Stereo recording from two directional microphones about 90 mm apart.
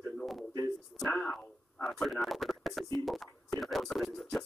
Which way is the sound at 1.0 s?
25° left (ahead or behind).